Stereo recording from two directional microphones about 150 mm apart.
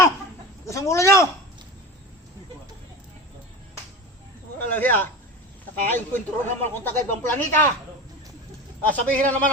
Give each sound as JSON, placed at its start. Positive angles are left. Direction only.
{"t": 0.7, "sound": "speech", "side_deg": 20}
{"t": 4.5, "sound": "speech", "side_deg": 10}
{"t": 8.9, "sound": "speech", "side_deg": 10}